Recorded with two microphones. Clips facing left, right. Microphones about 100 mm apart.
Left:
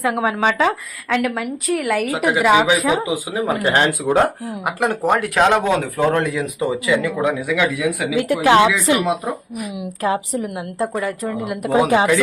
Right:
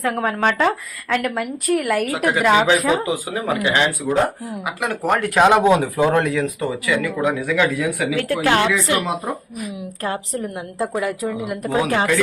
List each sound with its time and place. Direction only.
0.0 s a woman's voice: 5° left (ahead or behind)
3.5 s speech: 45° left (ahead or behind)
5.2 s a woman's voice: centre (ahead or behind)
5.6 s speech: 15° right (ahead or behind)
6.3 s speech: 15° left (ahead or behind)
7.5 s a woman's voice: centre (ahead or behind)
8.1 s speech: 15° left (ahead or behind)
10.8 s a woman's voice: 5° right (ahead or behind)
11.7 s speech: 20° left (ahead or behind)